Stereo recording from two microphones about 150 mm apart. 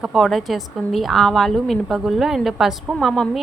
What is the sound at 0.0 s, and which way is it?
A woman's voice, centre (ahead or behind).